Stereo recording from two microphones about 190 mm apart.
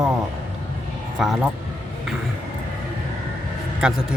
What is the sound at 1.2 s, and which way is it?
Speech, centre (ahead or behind).